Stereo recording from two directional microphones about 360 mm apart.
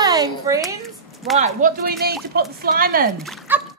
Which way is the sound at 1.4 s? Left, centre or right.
Right.